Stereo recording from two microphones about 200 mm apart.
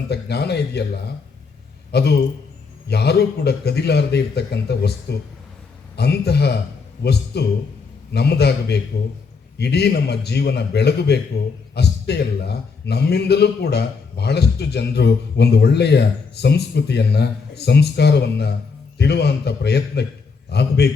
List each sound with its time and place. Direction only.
0.1 s a man's voice: 55° left (ahead or behind)
1.9 s a man's voice: 55° left (ahead or behind)